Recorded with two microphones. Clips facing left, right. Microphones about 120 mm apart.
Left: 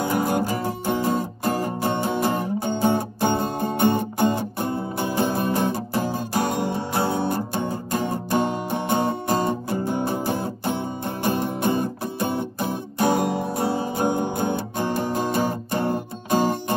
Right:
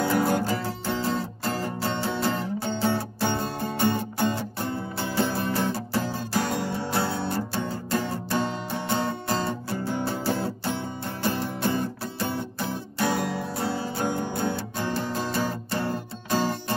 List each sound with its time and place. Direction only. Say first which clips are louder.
0.0 s music: left 1 dB; 15° left (ahead or behind)